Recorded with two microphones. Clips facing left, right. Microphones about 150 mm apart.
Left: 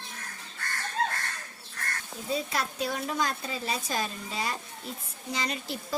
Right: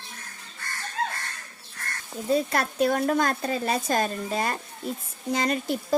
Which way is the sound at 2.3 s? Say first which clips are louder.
Right 7 dB; 55° right (ahead or behind).